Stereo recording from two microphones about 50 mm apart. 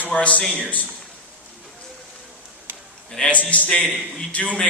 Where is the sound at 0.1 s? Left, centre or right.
Left.